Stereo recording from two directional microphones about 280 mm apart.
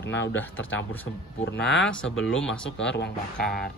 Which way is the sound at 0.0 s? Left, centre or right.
Left.